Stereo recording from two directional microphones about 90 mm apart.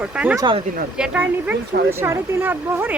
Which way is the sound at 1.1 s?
25° right (ahead or behind).